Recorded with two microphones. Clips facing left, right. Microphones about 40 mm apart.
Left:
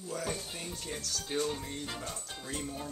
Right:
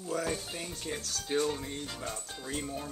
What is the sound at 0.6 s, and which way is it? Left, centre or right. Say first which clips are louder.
Speech: right 2 dB; centre.